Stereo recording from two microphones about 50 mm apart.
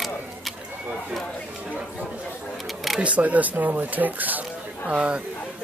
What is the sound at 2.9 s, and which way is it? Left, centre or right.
Speech, right.